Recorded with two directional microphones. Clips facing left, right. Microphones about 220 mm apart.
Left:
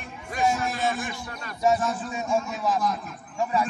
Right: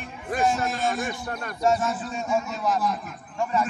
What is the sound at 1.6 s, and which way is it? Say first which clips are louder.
A man's voice: even; centre (ahead or behind).